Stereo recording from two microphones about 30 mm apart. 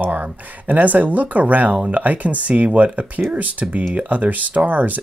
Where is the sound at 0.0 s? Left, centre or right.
Right.